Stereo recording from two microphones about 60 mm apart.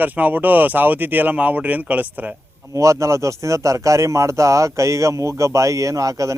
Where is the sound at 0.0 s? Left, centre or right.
Right.